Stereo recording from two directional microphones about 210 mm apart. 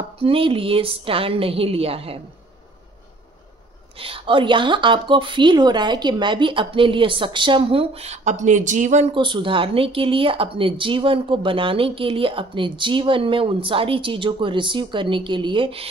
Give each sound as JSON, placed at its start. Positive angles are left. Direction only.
{"t": 0.2, "sound": "a woman's voice", "side_deg": -25}
{"t": 4.0, "sound": "a woman's voice", "side_deg": -25}